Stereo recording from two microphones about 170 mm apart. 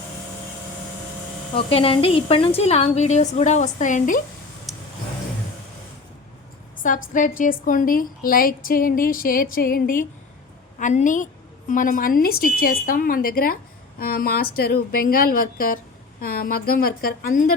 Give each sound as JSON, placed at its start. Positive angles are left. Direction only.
{"t": 1.5, "sound": "a woman's voice", "side_deg": 35}
{"t": 4.7, "sound": "vehicle", "side_deg": 0}
{"t": 6.8, "sound": "a woman's voice", "side_deg": 50}